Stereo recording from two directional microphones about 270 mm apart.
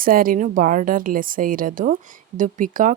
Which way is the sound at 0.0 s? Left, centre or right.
Right.